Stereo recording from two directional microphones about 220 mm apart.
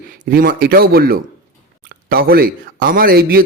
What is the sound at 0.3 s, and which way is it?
A man's voice, 40° right (ahead or behind).